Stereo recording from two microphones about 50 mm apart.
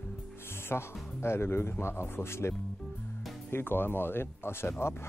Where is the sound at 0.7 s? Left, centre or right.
Left.